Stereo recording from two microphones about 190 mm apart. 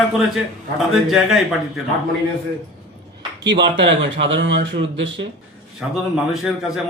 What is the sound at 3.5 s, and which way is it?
Speech, 65° right (ahead or behind).